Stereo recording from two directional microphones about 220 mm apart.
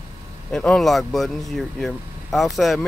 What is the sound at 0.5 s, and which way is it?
Speech, centre (ahead or behind).